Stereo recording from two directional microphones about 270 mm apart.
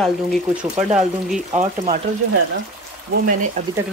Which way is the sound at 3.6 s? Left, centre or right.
Right.